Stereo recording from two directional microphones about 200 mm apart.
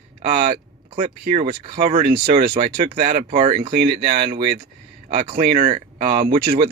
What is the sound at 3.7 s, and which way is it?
Speech, 45° right (ahead or behind).